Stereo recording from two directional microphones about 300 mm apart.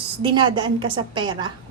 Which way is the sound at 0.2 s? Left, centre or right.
Centre.